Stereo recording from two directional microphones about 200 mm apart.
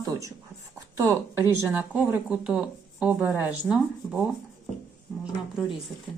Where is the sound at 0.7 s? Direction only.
15° right (ahead or behind).